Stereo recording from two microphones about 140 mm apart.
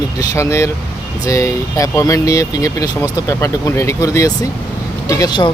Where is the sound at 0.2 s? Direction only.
20° left (ahead or behind).